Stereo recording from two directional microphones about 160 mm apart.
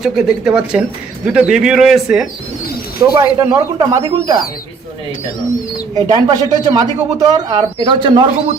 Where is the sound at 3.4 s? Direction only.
20° right (ahead or behind).